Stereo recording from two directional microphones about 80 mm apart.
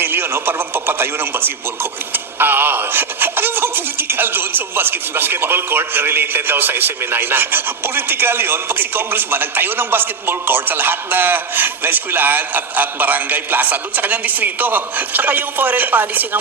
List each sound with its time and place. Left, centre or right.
0.0 s speech: right